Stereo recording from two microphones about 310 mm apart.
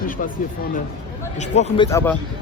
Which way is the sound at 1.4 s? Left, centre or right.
Left.